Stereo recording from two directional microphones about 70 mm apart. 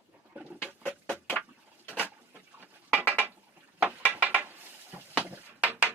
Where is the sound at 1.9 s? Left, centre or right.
Right.